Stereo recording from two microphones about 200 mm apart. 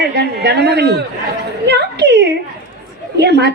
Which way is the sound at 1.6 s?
55° right (ahead or behind).